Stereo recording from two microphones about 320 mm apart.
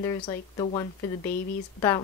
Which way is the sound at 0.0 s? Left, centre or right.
Centre.